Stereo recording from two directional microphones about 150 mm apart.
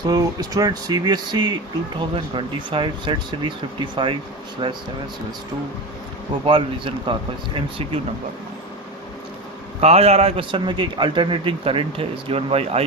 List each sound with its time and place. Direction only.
0.0 s a man's voice: 25° right (ahead or behind)
6.4 s a man's voice: 35° right (ahead or behind)
9.8 s a man's voice: 45° right (ahead or behind)